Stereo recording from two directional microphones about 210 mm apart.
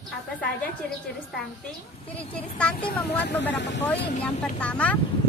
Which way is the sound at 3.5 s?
55° left (ahead or behind).